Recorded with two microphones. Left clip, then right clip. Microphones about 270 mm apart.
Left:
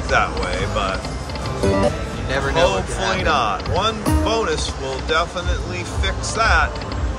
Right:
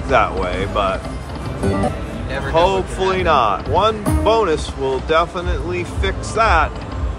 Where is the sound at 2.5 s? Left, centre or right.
Right.